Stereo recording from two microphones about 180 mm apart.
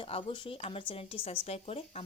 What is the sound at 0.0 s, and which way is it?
Speech, 30° left (ahead or behind).